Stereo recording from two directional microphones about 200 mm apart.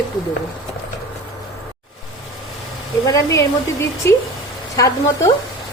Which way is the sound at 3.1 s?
15° left (ahead or behind).